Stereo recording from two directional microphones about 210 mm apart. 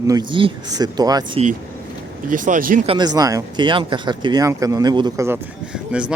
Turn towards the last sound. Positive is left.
turn(degrees=-5)  # may be behind; listen again after turning